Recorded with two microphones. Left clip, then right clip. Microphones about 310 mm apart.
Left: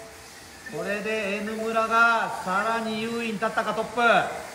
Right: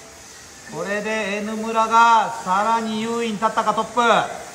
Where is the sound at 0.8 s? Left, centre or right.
Right.